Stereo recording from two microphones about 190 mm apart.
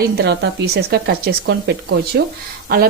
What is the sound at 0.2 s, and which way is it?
Speech, 60° right (ahead or behind).